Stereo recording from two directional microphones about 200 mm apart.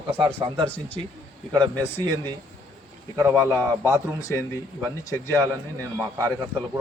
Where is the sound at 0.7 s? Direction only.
10° left (ahead or behind).